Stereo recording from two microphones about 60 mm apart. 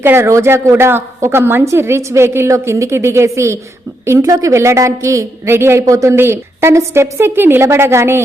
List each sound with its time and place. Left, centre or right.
0.0 s speech: right
0.3 s a woman's voice: right
4.2 s a woman's voice: right
5.5 s a woman's voice: right
5.8 s a woman's voice: right
6.1 s a woman's voice: right